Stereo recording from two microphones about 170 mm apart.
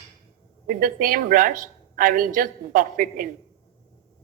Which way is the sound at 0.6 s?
55° right (ahead or behind).